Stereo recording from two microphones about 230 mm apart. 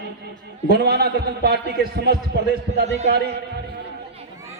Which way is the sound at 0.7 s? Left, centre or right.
Right.